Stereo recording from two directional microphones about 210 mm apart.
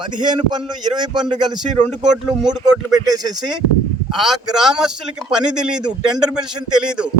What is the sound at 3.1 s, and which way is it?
Speech, 20° right (ahead or behind).